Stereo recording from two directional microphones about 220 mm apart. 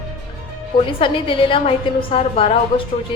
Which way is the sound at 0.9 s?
25° left (ahead or behind).